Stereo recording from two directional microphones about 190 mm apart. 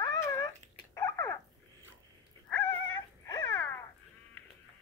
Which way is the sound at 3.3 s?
20° left (ahead or behind).